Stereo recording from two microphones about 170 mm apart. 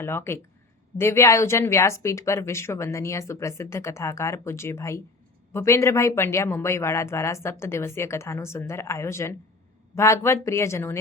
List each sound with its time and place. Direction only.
0.0 s speech: 15° left (ahead or behind)